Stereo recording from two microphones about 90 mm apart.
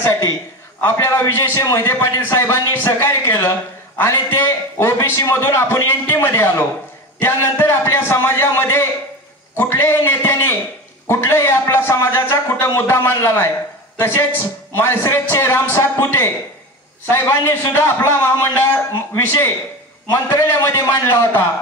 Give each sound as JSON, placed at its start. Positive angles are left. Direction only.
{"t": 0.8, "sound": "a man's voice", "side_deg": 35}